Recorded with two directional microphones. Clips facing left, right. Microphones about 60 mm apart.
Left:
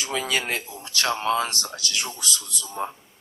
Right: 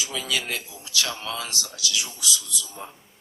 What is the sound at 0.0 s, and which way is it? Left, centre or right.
A man's voice, left.